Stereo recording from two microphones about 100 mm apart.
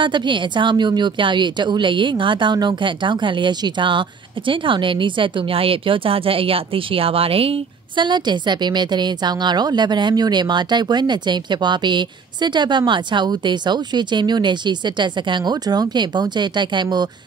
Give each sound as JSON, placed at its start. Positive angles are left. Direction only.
{"t": 0.0, "sound": "a woman's voice", "side_deg": -50}
{"t": 7.9, "sound": "a woman's voice", "side_deg": -50}